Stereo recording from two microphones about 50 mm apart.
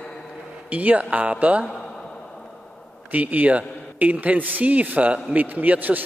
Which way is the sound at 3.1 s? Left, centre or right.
Right.